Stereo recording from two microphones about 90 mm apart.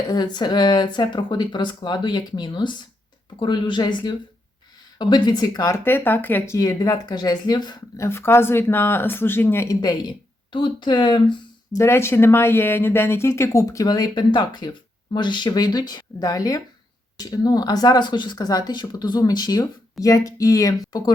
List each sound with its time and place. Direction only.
0.1 s speech: 50° left (ahead or behind)
5.7 s speech: 25° left (ahead or behind)
6.6 s speech: 40° left (ahead or behind)
7.9 s speech: 30° left (ahead or behind)
9.6 s speech: 50° left (ahead or behind)
11.7 s speech: 30° left (ahead or behind); by 21.1 s 45° left (ahead or behind)